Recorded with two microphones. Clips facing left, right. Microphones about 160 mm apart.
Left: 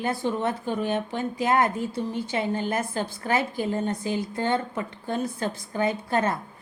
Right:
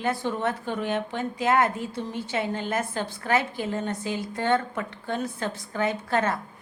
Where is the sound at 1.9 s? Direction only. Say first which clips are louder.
Left 2 dB; 15° left (ahead or behind).